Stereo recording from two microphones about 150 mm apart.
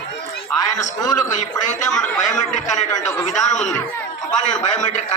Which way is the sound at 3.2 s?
55° left (ahead or behind).